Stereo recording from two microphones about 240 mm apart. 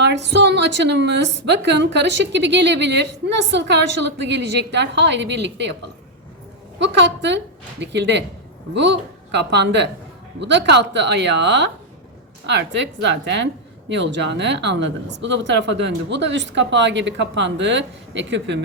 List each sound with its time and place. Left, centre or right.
0.0 s a woman's voice: right
6.7 s a woman's voice: right